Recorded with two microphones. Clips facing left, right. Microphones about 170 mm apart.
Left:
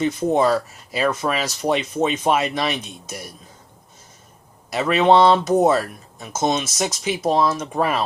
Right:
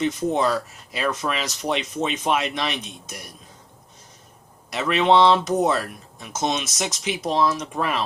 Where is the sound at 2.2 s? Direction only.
45° left (ahead or behind).